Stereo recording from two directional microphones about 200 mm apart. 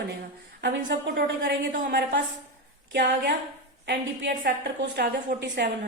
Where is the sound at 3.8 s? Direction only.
55° right (ahead or behind).